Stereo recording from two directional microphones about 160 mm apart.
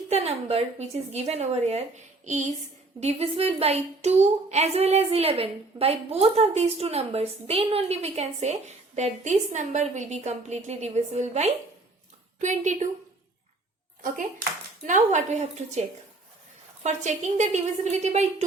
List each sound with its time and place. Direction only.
0.1 s a woman's voice: 40° right (ahead or behind)
14.8 s a woman's voice: 50° right (ahead or behind)
16.8 s a woman's voice: 50° right (ahead or behind)